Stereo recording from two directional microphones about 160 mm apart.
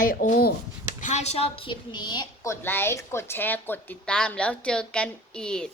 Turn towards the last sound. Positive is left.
turn(degrees=5)  # may be behind; listen again after turning